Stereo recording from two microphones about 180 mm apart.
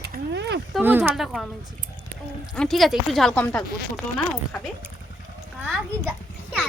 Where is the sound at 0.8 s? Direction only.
10° right (ahead or behind).